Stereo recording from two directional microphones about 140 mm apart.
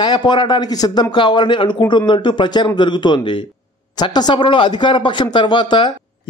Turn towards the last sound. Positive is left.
turn(degrees=35)  # may be behind; listen again after turning